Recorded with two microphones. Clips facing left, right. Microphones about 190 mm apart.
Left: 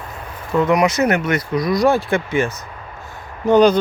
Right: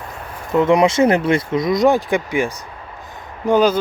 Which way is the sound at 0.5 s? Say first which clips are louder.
Right 2 dB; 25° right (ahead or behind).